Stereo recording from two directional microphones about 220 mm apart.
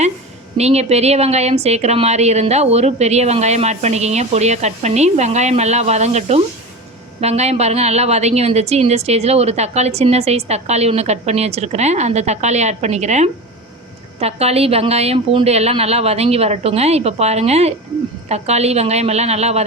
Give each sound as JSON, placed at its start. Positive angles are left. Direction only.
{"t": 0.5, "sound": "a woman's voice", "side_deg": -30}